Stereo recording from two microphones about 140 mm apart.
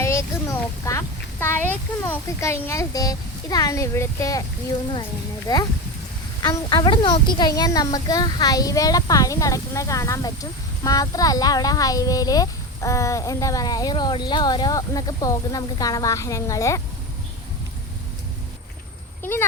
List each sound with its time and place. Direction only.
0.0 s speech: 20° left (ahead or behind)
5.5 s speech: 25° left (ahead or behind)
19.2 s speech: 15° left (ahead or behind)